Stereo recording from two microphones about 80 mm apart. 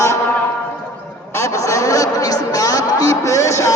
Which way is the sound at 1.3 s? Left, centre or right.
Left.